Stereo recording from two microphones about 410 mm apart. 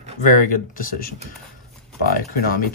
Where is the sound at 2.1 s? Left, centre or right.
Left.